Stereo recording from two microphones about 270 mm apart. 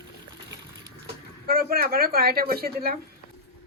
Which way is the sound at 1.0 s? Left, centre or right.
Right.